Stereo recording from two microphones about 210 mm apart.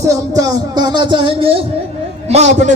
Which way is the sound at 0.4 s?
20° right (ahead or behind).